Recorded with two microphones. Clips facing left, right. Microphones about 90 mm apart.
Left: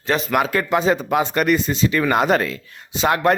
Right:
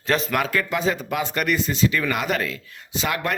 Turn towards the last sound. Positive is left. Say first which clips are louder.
# left 8 dB
turn(degrees=25)  # may be behind; listen again after turning